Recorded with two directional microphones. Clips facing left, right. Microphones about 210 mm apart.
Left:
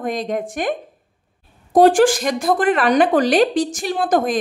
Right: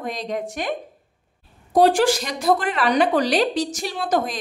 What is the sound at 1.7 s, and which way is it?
A woman's voice, 50° left (ahead or behind).